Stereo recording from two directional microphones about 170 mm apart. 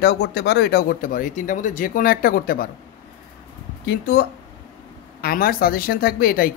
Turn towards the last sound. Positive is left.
turn(degrees=60)  # may be behind; listen again after turning